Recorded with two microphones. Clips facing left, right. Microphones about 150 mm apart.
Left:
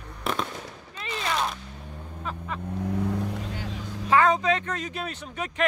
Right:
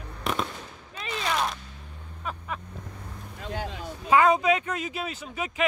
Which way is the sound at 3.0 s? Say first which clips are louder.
Left 14 dB; 80° left.